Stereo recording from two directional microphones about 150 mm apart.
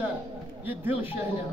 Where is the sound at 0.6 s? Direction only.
15° right (ahead or behind).